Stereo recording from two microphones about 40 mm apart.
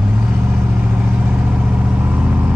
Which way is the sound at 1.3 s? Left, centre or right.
Right.